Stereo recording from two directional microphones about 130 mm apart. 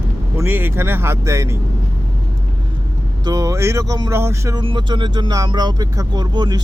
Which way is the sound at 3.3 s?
25° right (ahead or behind).